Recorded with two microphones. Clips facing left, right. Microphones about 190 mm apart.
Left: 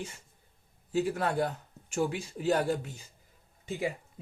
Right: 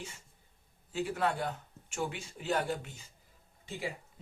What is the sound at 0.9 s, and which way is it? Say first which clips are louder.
Speech: left 4 dB; 40° left (ahead or behind).